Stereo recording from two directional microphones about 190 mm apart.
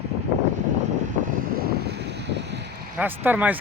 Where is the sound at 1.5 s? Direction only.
55° right (ahead or behind).